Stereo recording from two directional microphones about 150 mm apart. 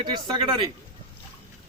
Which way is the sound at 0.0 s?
30° right (ahead or behind).